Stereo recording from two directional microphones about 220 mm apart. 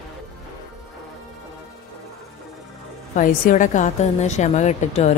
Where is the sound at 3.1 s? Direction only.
35° left (ahead or behind).